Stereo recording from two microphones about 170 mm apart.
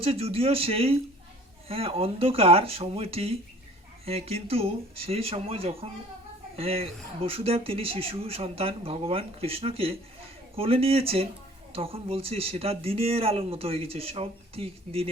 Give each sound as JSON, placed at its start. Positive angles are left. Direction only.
{"t": 0.0, "sound": "speech", "side_deg": -35}